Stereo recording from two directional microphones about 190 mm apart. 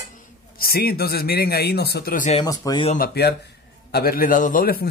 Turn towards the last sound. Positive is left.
turn(degrees=45)  # may be behind; listen again after turning